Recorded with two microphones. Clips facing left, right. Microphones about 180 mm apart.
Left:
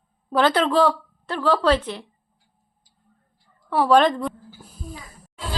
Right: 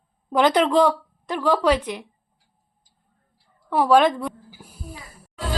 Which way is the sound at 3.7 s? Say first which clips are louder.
Even; 10° right (ahead or behind).